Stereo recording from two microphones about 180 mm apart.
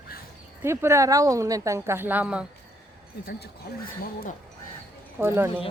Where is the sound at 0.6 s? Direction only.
15° right (ahead or behind).